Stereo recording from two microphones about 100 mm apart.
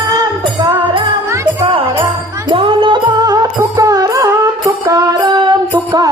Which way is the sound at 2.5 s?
65° right (ahead or behind).